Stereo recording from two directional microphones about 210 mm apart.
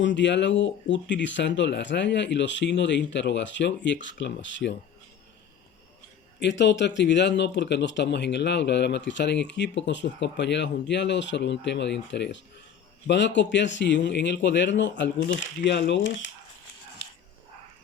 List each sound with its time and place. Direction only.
0.0 s speech: 60° left (ahead or behind)
6.4 s speech: 55° left (ahead or behind)